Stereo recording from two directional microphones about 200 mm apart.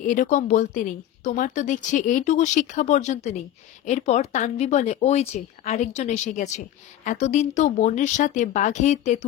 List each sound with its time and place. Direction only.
0.0 s speech: 40° left (ahead or behind)